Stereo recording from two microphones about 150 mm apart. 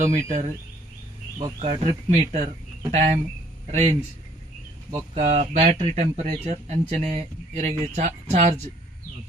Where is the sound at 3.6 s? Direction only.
45° right (ahead or behind).